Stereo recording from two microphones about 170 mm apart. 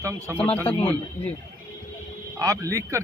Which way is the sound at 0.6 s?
35° left (ahead or behind).